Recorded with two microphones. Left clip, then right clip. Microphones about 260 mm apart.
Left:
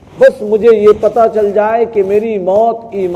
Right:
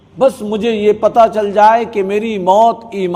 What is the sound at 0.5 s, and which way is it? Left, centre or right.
A man's voice, right.